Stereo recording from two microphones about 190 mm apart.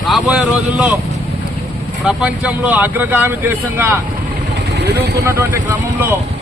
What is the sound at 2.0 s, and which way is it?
Speech, 5° right (ahead or behind).